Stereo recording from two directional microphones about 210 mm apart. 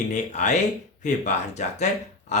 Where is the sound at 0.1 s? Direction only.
35° left (ahead or behind).